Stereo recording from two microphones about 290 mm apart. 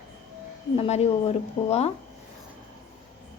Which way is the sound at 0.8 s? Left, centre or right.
Left.